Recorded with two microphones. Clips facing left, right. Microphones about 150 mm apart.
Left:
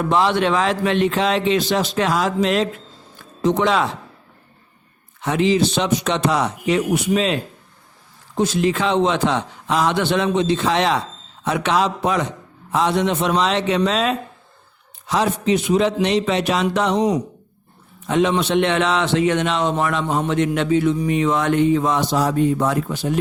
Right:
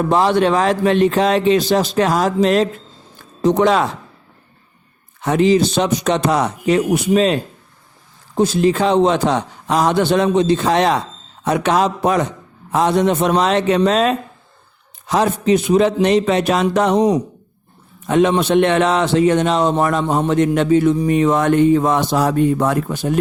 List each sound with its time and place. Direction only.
0.0 s a man's voice: 40° right (ahead or behind)
3.2 s music: 40° right (ahead or behind)
5.2 s a man's voice: 45° right (ahead or behind)
8.4 s a man's voice: 35° right (ahead or behind)
18.0 s a man's voice: 50° right (ahead or behind)